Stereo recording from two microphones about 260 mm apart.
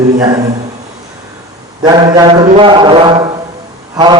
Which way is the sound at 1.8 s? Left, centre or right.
Centre.